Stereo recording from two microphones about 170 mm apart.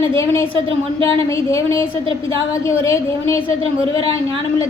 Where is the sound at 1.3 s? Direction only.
15° left (ahead or behind).